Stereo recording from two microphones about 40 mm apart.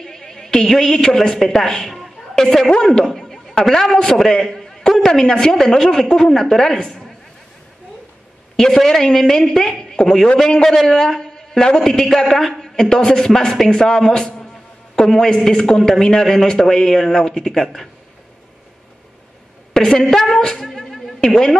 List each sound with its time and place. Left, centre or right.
0.0 s a man's voice: centre
8.5 s a man's voice: centre
19.7 s a woman's voice: centre